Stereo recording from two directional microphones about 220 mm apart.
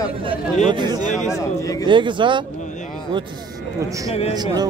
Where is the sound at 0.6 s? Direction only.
20° right (ahead or behind).